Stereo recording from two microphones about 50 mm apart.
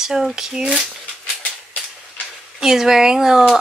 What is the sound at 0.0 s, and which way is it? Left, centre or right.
Speech, centre.